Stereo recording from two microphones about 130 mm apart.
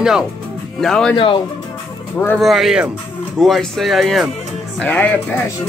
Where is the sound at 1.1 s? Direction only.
40° left (ahead or behind).